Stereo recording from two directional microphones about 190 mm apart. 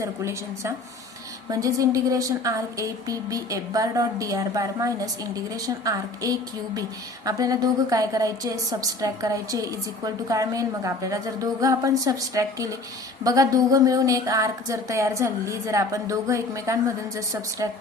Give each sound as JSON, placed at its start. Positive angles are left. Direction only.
{"t": 0.0, "sound": "a woman's voice", "side_deg": -15}